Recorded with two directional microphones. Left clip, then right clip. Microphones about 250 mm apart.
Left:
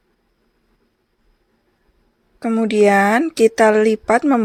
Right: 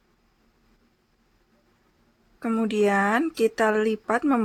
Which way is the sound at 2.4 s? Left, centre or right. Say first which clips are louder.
Left 9 dB; centre.